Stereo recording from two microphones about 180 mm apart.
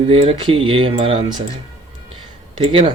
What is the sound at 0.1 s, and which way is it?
Speech, 30° right (ahead or behind).